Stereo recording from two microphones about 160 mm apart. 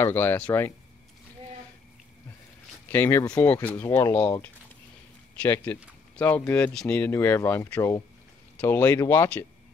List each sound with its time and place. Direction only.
0.0 s speech: 10° left (ahead or behind)
2.9 s speech: 15° left (ahead or behind)
5.4 s speech: 10° left (ahead or behind)